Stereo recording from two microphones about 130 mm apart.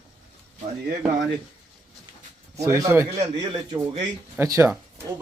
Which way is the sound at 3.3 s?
35° right (ahead or behind).